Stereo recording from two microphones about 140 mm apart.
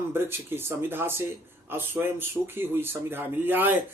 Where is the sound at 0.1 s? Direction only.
15° right (ahead or behind).